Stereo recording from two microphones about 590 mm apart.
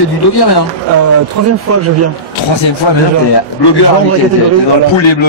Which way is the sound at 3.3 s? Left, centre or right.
Left.